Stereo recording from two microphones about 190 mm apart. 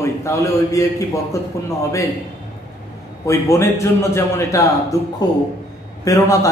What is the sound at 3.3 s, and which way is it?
Speech, 15° left (ahead or behind).